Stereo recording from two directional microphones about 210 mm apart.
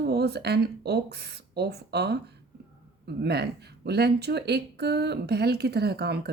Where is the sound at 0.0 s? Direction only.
50° right (ahead or behind).